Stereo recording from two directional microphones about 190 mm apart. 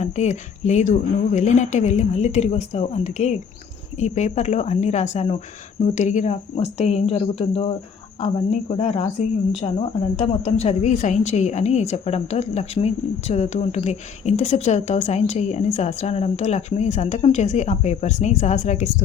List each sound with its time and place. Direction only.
0.0 s a woman's voice: 35° left (ahead or behind)
10.2 s a woman's voice: 35° left (ahead or behind)